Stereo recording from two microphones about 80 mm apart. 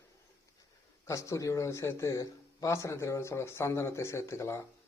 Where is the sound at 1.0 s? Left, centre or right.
Left.